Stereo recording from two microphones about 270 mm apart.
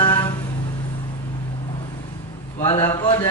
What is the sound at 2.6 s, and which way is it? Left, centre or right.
Speech, centre.